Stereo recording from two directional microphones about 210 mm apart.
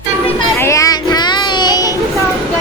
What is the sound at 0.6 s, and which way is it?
Children playing, 15° left (ahead or behind).